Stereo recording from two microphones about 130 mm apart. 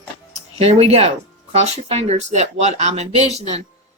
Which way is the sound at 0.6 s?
50° right (ahead or behind).